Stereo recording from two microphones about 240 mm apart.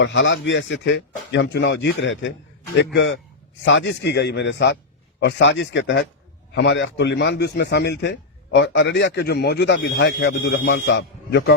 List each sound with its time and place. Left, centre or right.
0.0 s a man's voice: left